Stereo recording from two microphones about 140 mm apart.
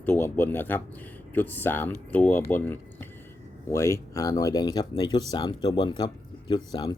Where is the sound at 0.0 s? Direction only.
15° left (ahead or behind).